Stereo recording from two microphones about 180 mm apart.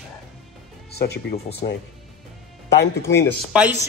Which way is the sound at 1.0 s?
60° left (ahead or behind).